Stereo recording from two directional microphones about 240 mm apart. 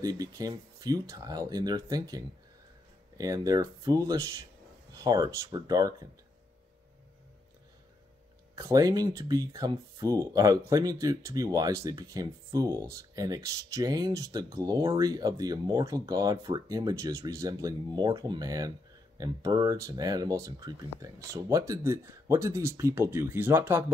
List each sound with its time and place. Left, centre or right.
0.0 s speech: centre
8.5 s speech: centre